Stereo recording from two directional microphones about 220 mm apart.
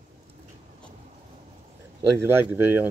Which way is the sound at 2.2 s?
10° right (ahead or behind).